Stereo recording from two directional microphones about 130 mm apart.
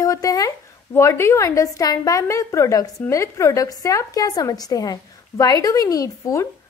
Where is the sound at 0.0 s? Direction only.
30° left (ahead or behind).